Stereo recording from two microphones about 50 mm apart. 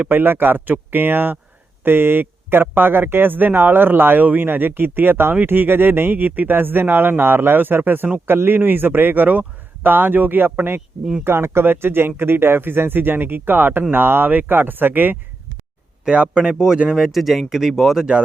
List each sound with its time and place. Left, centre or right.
0.0 s speech: right
11.2 s speech: right
16.0 s speech: right; by 18.0 s centre